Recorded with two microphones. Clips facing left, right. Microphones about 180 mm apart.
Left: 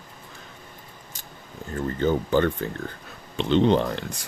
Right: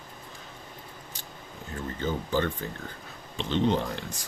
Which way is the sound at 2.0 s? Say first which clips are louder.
Left 7 dB; 60° left (ahead or behind).